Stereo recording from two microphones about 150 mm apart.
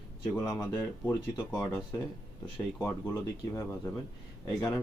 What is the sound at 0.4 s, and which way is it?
Speech, 25° left (ahead or behind).